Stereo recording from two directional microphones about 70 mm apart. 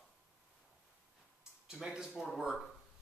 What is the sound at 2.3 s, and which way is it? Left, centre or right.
Speech, centre.